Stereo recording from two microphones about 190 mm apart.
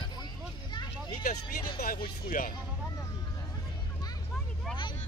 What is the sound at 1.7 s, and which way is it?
Speech, 55° left (ahead or behind).